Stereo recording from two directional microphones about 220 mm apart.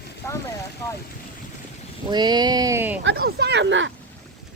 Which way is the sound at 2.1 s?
20° right (ahead or behind).